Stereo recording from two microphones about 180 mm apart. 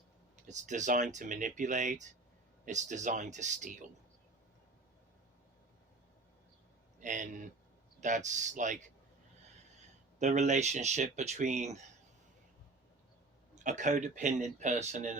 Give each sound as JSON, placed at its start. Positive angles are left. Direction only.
{"t": 0.4, "sound": "speech", "side_deg": -40}
{"t": 7.0, "sound": "speech", "side_deg": -45}
{"t": 10.2, "sound": "speech", "side_deg": -40}
{"t": 13.7, "sound": "speech", "side_deg": -45}